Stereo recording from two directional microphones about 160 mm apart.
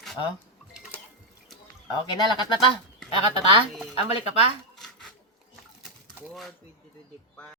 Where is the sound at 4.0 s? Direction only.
40° left (ahead or behind).